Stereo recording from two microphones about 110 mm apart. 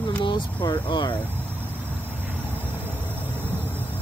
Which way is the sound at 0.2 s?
45° left (ahead or behind).